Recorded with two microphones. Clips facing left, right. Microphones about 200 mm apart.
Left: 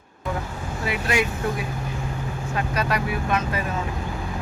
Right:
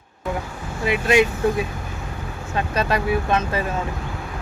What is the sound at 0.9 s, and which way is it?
Speech, 20° right (ahead or behind).